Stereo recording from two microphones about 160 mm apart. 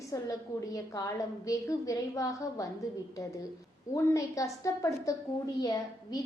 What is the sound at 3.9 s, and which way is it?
A woman's voice, 20° left (ahead or behind).